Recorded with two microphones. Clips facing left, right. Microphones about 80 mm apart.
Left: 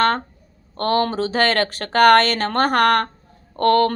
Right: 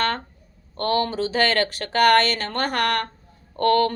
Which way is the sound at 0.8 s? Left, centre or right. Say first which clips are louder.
Left 3 dB; left.